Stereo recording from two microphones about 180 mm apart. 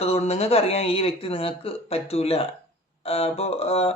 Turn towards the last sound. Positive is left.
turn(degrees=35)  # may be behind; listen again after turning